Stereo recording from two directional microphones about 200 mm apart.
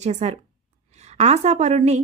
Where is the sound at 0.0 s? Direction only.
35° right (ahead or behind).